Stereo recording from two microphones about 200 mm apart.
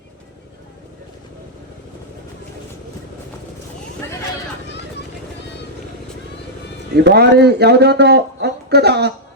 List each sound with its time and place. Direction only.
6.9 s speech: 55° right (ahead or behind)